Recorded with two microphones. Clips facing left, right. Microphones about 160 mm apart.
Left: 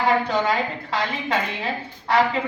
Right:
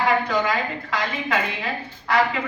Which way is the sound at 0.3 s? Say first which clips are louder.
Left 1 dB; 25° left (ahead or behind).